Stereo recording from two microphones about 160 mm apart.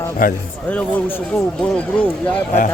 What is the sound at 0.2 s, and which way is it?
Speech, 55° left (ahead or behind).